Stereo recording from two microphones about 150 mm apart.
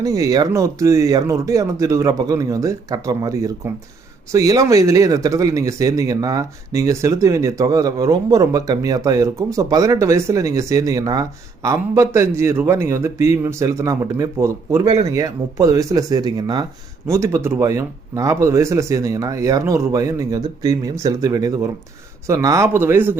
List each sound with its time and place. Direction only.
0.0 s speech: 25° right (ahead or behind)